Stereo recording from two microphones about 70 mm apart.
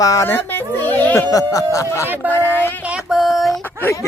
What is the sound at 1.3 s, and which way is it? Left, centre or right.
Speech, left.